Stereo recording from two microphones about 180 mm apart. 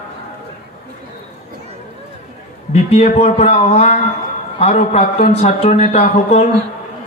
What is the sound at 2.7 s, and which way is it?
A man's voice, 35° left (ahead or behind).